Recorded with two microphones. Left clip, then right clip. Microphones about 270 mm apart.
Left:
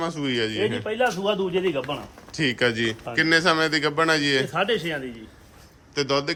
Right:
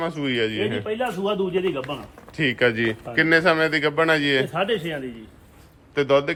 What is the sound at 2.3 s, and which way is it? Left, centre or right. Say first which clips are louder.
A man's voice: right 2 dB; centre.